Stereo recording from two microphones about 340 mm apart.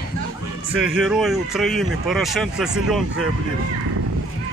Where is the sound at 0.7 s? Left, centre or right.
Right.